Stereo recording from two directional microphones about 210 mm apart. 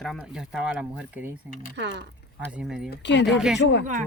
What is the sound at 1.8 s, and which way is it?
Speech, 55° right (ahead or behind).